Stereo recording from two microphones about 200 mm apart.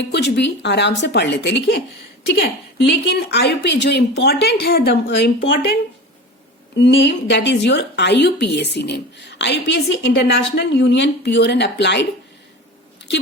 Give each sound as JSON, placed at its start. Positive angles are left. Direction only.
{"t": 0.1, "sound": "a woman's voice", "side_deg": 60}
{"t": 6.7, "sound": "a woman's voice", "side_deg": 60}